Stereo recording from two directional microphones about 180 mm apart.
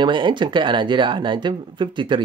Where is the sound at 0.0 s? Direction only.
25° right (ahead or behind).